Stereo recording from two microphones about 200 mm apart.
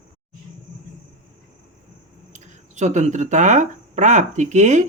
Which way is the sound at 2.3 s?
35° right (ahead or behind).